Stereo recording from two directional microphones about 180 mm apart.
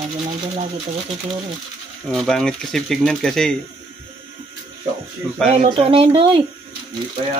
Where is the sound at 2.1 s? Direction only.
Centre (ahead or behind).